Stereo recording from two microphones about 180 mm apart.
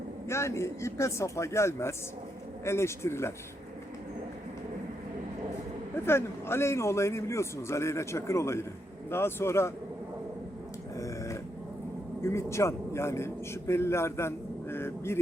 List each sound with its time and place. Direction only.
0.3 s a man's voice: 15° left (ahead or behind)
6.1 s a man's voice: 15° left (ahead or behind)
10.9 s grunt: 15° left (ahead or behind)
12.2 s a man's voice: 15° left (ahead or behind)